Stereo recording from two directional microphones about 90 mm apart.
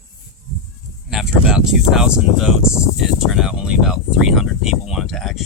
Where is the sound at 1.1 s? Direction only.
5° right (ahead or behind).